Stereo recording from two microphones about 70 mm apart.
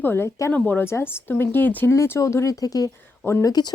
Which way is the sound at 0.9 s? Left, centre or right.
Left.